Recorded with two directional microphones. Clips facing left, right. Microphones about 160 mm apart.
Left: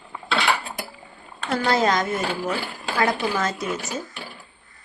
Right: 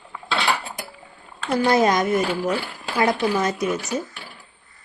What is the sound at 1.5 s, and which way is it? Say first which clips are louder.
Speech: right 3 dB; 15° right (ahead or behind).